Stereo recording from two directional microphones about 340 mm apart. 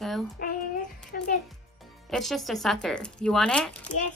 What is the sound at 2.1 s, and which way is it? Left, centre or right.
A woman's voice, centre.